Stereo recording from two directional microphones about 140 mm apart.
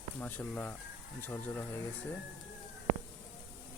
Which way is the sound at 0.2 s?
10° left (ahead or behind).